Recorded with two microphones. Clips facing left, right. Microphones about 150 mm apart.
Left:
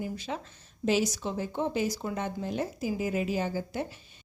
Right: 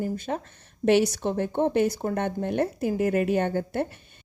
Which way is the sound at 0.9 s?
65° right (ahead or behind).